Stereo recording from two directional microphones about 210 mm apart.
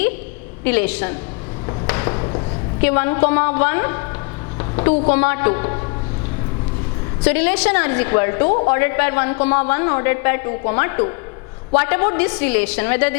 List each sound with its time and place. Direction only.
0.6 s a woman's voice: 10° left (ahead or behind)
1.9 s a sound: 15° left (ahead or behind)
2.8 s a woman's voice: 10° left (ahead or behind)
7.2 s a woman's voice: 10° left (ahead or behind)